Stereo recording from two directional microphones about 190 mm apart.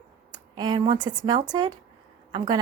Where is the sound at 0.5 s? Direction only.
20° right (ahead or behind).